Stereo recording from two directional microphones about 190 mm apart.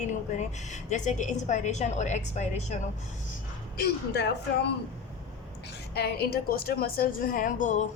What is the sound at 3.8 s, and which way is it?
Speech, 60° left (ahead or behind).